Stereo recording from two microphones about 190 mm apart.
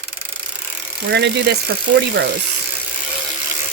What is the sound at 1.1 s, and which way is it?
Speech, 65° right (ahead or behind).